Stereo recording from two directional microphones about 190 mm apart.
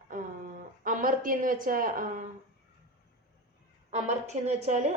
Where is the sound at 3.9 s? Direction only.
35° right (ahead or behind).